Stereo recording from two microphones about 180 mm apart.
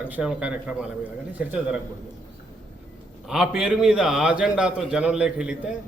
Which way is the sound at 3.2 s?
5° right (ahead or behind).